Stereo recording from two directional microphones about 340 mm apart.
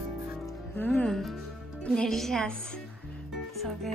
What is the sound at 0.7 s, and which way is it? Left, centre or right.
Music, centre.